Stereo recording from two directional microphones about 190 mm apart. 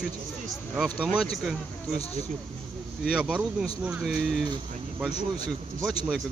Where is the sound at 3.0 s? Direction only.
5° right (ahead or behind).